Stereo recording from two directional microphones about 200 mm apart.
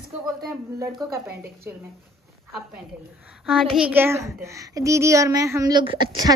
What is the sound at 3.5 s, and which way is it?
Speech, centre (ahead or behind).